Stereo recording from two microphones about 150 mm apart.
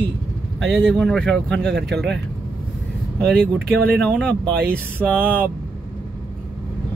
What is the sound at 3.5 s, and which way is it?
Speech, 90° right.